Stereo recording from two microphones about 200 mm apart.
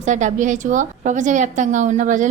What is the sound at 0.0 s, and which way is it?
A woman's voice, 40° right (ahead or behind).